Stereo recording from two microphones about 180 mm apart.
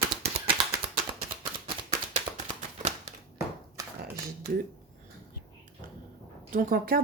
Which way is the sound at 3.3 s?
20° right (ahead or behind).